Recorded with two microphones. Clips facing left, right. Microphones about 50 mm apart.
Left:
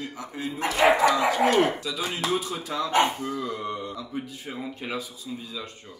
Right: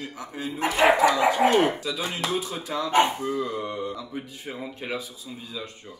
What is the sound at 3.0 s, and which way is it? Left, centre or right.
Speech, centre.